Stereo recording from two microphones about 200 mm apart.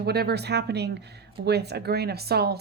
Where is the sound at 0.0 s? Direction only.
55° right (ahead or behind).